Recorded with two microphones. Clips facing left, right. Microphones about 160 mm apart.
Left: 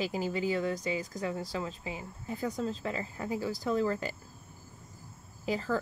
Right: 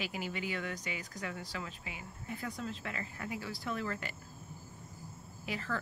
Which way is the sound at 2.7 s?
30° left (ahead or behind).